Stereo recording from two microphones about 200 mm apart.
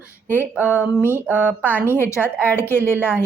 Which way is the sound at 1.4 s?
5° right (ahead or behind).